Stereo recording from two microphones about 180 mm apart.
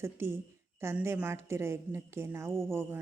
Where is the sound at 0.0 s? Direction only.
15° right (ahead or behind).